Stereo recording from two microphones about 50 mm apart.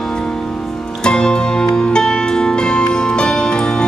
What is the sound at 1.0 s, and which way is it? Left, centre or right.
Music, centre.